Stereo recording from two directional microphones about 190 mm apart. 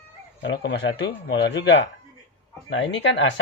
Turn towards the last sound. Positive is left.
turn(degrees=75)  # may be behind; listen again after turning